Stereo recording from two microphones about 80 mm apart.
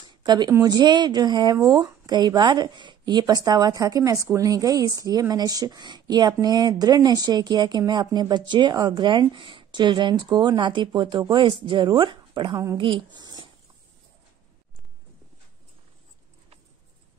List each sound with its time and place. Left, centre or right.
0.0 s a sound: right
0.5 s speech: right
1.6 s a woman's voice: right